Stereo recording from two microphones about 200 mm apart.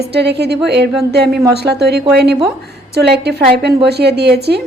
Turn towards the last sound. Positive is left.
turn(degrees=-55)  # may be behind; listen again after turning